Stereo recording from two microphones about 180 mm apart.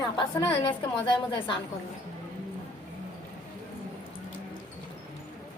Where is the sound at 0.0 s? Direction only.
25° left (ahead or behind).